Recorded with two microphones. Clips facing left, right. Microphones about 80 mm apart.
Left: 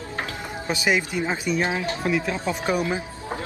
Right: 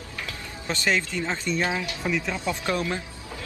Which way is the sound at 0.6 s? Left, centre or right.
Centre.